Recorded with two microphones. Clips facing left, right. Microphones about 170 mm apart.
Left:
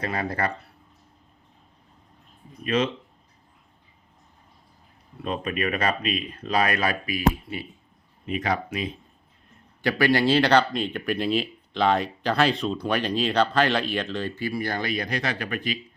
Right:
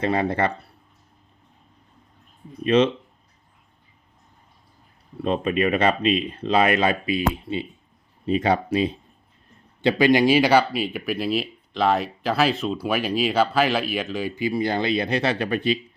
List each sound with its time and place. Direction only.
0.0 s speech: 25° right (ahead or behind)
2.6 s speech: 30° right (ahead or behind)
5.2 s speech: 30° right (ahead or behind)
9.8 s speech: 20° right (ahead or behind)